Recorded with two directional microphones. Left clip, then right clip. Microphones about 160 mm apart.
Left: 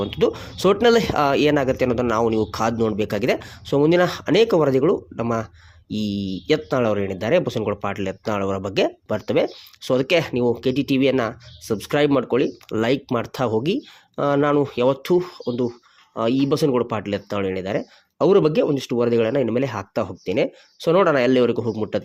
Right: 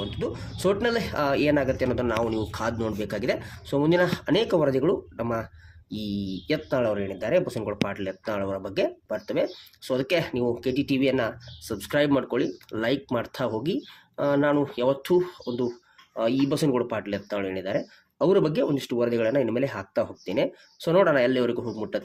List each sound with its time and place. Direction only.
0.0 s speech: 50° left (ahead or behind)